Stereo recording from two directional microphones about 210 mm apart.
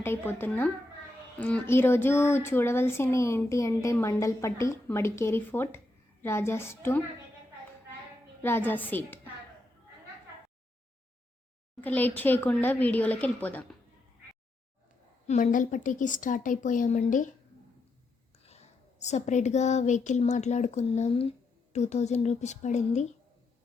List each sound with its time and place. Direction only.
0.0 s a woman's voice: 10° left (ahead or behind)
8.4 s a woman's voice: 10° left (ahead or behind)
11.8 s a woman's voice: 10° left (ahead or behind)
15.3 s a woman's voice: 35° left (ahead or behind)
18.4 s a woman's voice: 30° left (ahead or behind)